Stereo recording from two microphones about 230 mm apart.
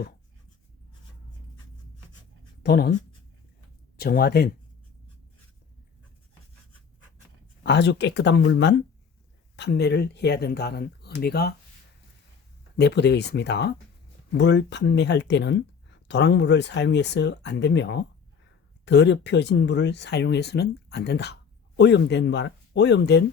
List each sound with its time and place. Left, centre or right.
2.6 s speech: left
3.9 s speech: left
7.6 s speech: left
12.7 s speech: left